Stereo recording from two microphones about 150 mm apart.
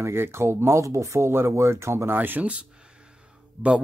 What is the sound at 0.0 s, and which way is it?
Speech, 15° right (ahead or behind).